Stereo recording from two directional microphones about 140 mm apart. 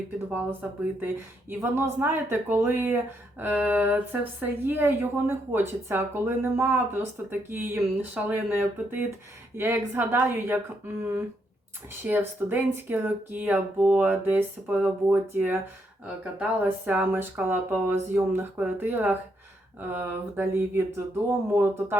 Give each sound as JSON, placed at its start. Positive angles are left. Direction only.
{"t": 0.9, "sound": "speech", "side_deg": -15}